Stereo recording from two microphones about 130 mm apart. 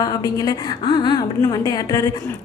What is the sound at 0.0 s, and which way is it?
A woman's voice, 30° left (ahead or behind).